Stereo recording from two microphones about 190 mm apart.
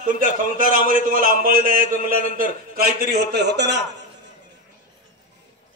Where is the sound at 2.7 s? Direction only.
55° right (ahead or behind).